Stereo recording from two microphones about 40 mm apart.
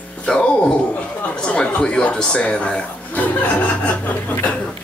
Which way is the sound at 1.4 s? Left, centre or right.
Left.